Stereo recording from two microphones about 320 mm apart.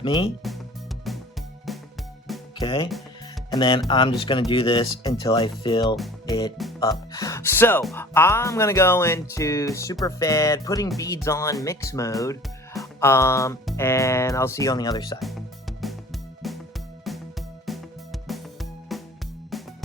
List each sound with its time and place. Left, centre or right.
0.0 s speech: centre
1.0 s music: centre
2.6 s speech: centre
6.2 s music: centre
7.1 s speech: centre
15.2 s music: centre